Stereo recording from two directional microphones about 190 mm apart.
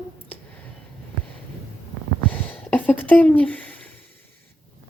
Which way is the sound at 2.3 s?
10° left (ahead or behind).